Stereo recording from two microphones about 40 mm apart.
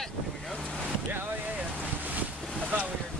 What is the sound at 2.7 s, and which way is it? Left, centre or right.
Boat, right.